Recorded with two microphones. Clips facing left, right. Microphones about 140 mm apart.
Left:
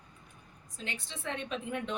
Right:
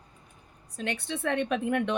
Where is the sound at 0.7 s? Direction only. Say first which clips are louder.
Right 10 dB; 65° right (ahead or behind).